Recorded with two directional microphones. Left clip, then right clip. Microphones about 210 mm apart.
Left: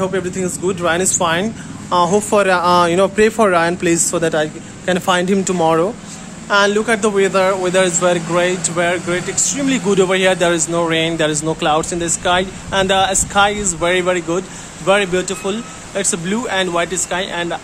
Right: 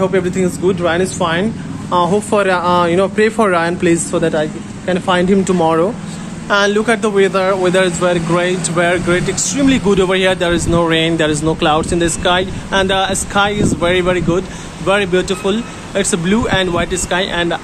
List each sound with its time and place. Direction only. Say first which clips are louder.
0.0 s a man's voice: right 4 dB; 5° left (ahead or behind)
0.7 s a man's voice: right 1 dB; 20° left (ahead or behind)